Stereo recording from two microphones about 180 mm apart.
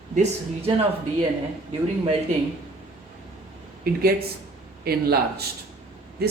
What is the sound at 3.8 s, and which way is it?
A woman's voice, 60° right (ahead or behind).